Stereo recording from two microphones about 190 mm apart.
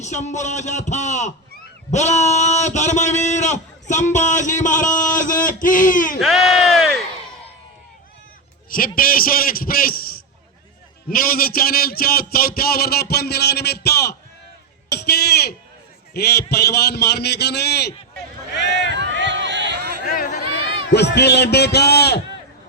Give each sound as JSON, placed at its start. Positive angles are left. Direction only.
{"t": 0.0, "sound": "a man's voice", "side_deg": 40}
{"t": 6.1, "sound": "speech", "side_deg": 0}
{"t": 9.0, "sound": "a man's voice", "side_deg": 50}
{"t": 18.5, "sound": "run", "side_deg": 65}
{"t": 18.9, "sound": "run", "side_deg": -70}
{"t": 20.1, "sound": "a sound", "side_deg": 40}
{"t": 20.9, "sound": "speech", "side_deg": 60}